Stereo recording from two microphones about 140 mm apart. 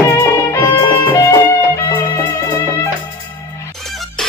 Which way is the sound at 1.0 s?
20° left (ahead or behind).